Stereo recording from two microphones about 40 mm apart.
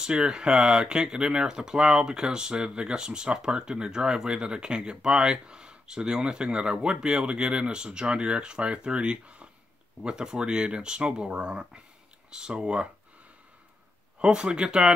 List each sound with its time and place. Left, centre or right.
0.0 s speech: right
10.0 s speech: centre
14.2 s speech: right